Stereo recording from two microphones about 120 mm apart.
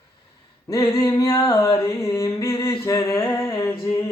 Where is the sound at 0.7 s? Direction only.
30° left (ahead or behind).